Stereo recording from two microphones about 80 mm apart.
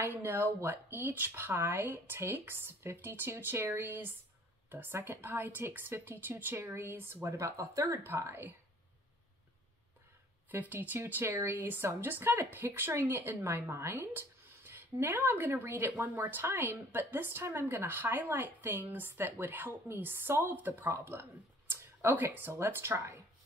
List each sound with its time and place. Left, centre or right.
0.0 s a woman's voice: right
7.2 s speech: right
10.5 s a woman's voice: right